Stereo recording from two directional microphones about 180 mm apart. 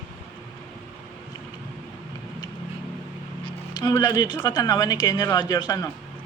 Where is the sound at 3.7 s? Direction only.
25° left (ahead or behind).